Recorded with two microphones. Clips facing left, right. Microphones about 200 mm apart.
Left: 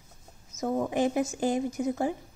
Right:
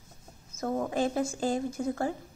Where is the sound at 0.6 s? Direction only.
10° left (ahead or behind).